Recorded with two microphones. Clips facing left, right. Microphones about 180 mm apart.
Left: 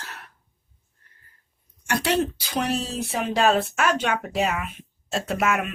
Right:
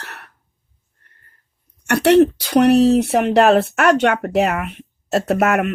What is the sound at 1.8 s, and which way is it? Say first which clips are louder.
Speech: right 11 dB; 65° right (ahead or behind).